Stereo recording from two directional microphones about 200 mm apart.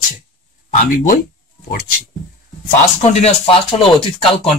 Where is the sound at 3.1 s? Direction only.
35° left (ahead or behind).